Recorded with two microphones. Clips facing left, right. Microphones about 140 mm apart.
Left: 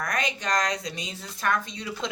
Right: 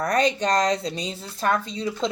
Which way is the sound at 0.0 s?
35° right (ahead or behind).